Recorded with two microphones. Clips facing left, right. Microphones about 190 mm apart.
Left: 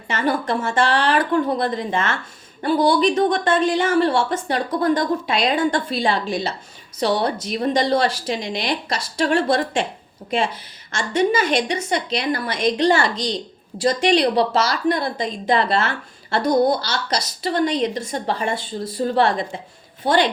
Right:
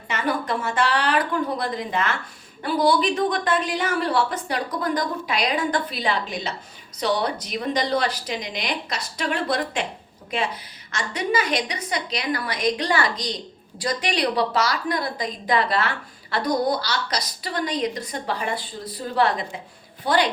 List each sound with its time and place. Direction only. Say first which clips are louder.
0.1 s a woman's voice: left 4 dB; 30° left (ahead or behind)
10.9 s a woman's voice: left 5 dB; 25° left (ahead or behind)